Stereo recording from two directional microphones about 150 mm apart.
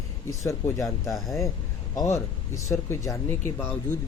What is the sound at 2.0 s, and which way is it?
Speech, 20° left (ahead or behind).